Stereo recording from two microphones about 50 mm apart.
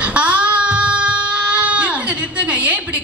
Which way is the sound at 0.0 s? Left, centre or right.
Right.